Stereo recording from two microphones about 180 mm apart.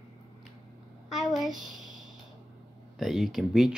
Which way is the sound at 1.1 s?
Centre (ahead or behind).